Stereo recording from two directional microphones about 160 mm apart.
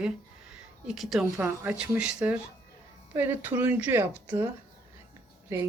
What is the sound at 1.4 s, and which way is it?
Speech, 15° right (ahead or behind).